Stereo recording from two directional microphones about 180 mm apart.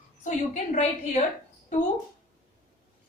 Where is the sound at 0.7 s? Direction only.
40° left (ahead or behind).